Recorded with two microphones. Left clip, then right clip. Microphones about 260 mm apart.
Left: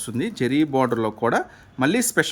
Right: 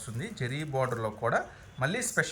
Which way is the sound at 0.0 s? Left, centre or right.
Left.